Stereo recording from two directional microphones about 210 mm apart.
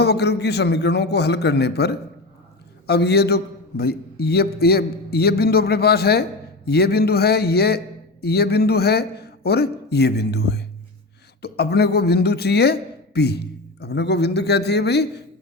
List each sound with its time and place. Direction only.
0.0 s a man's voice: 50° left (ahead or behind)